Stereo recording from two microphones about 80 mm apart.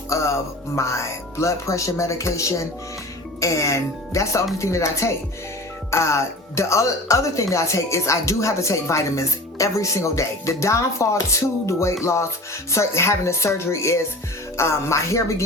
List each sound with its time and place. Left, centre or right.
0.1 s speech: left